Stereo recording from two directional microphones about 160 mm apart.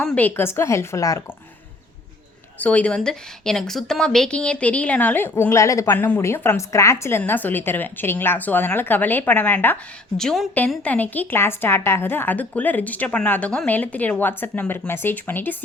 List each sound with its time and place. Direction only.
0.0 s a woman's voice: 5° left (ahead or behind)
2.6 s a woman's voice: 10° left (ahead or behind)